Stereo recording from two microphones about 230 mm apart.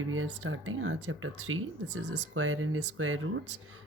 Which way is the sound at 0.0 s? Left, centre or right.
Right.